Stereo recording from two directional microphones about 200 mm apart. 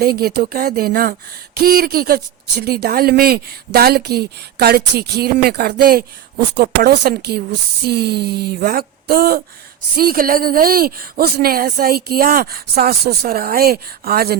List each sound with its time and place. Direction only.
0.0 s speech: 50° right (ahead or behind)